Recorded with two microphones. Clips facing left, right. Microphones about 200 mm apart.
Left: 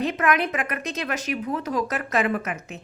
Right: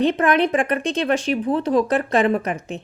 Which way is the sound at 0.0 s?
30° right (ahead or behind).